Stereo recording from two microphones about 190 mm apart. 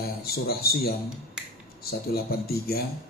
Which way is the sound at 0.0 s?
55° left (ahead or behind).